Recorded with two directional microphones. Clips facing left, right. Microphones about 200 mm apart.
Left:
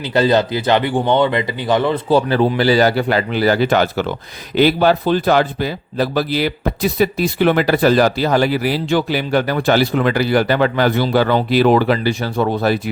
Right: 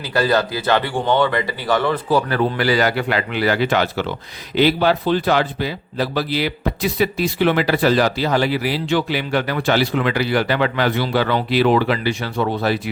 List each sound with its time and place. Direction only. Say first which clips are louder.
0.0 s a man's voice: left 4 dB; 20° left (ahead or behind); by 12.9 s 45° left (ahead or behind)